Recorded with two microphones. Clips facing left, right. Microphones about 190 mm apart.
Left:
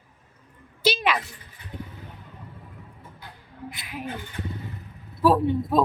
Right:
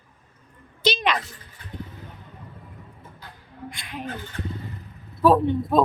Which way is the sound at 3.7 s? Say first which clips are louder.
Even; 5° left (ahead or behind).